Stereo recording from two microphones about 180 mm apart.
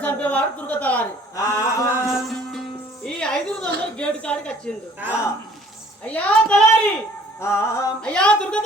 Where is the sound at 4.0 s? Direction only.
5° left (ahead or behind).